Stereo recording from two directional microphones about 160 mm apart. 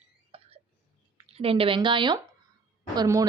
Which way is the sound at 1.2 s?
40° right (ahead or behind).